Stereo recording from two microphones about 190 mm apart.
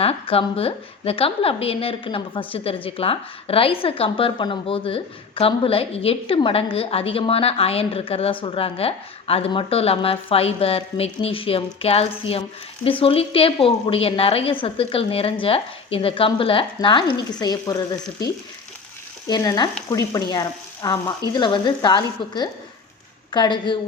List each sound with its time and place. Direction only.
0.0 s a woman's voice: 30° left (ahead or behind)
19.3 s a woman's voice: 20° left (ahead or behind)